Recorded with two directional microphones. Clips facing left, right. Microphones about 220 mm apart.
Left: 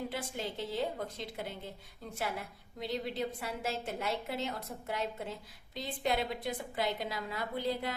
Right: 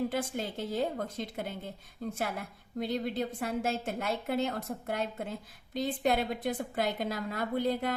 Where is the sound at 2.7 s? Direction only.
50° right (ahead or behind).